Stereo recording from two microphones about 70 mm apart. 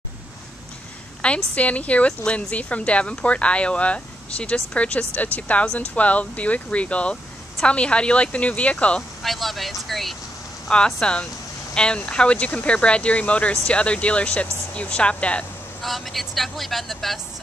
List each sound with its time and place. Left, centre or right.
1.2 s speech: centre
9.2 s speech: centre
11.0 s speech: centre
15.8 s speech: centre